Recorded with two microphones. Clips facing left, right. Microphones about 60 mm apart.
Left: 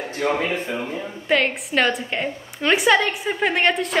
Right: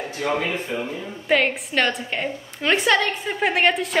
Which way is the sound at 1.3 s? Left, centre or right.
Centre.